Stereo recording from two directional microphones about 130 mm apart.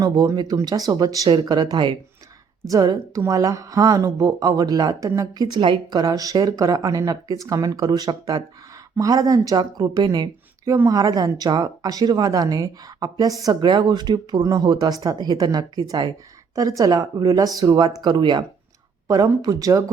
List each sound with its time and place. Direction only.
0.0 s speech: 30° right (ahead or behind)
19.0 s speech: 25° right (ahead or behind)